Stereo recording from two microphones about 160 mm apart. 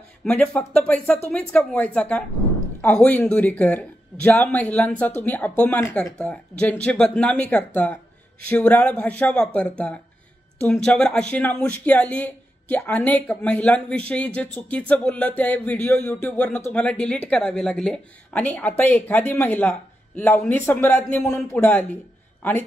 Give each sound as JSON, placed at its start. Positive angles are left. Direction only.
{"t": 0.2, "sound": "speech", "side_deg": 5}